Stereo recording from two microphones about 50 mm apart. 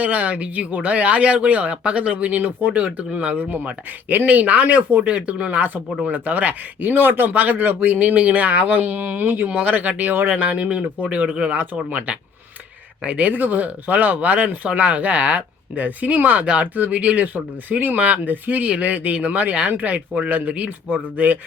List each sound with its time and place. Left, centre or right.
0.0 s speech: right
3.4 s speech: right